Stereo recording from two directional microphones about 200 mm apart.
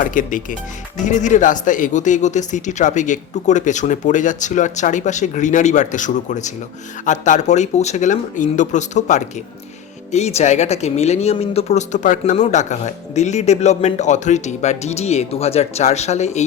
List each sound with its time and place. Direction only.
0.0 s speech: 40° left (ahead or behind)